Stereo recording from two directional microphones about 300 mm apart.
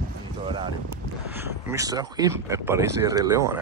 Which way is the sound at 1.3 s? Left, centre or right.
Centre.